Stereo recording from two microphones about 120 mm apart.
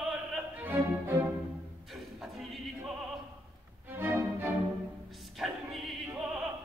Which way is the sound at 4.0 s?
15° right (ahead or behind).